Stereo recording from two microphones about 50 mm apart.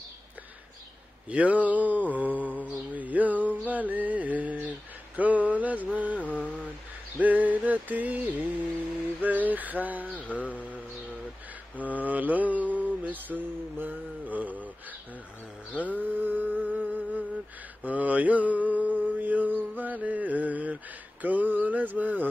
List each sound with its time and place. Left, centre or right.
1.3 s mantra: right
7.2 s a sound: right
10.2 s mantra: left
11.8 s mantra: right
15.9 s humming: right
17.8 s mantra: right
19.7 s a sound: right